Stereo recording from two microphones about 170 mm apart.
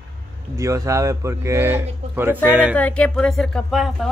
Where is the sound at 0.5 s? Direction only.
20° right (ahead or behind).